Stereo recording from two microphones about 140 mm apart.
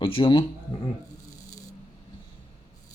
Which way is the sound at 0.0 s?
40° left (ahead or behind).